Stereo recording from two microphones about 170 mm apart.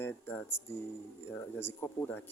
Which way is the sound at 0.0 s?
10° left (ahead or behind).